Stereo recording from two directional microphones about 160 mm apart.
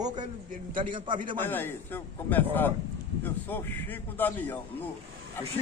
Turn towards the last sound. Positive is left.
turn(degrees=10)  # may be behind; listen again after turning